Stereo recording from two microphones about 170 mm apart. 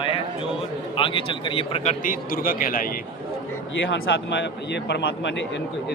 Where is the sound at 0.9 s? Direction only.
30° left (ahead or behind).